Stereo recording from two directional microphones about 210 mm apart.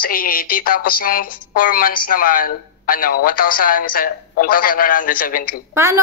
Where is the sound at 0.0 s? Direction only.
40° left (ahead or behind).